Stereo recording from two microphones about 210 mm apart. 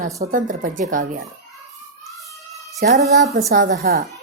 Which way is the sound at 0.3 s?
40° right (ahead or behind).